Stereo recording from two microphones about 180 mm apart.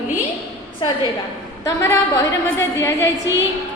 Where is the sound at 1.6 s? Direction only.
15° left (ahead or behind).